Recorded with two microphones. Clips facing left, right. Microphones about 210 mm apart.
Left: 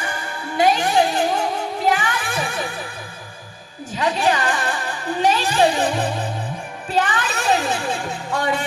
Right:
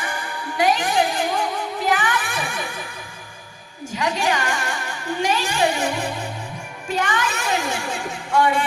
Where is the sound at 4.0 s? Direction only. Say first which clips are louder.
Left 3 dB; 35° left (ahead or behind).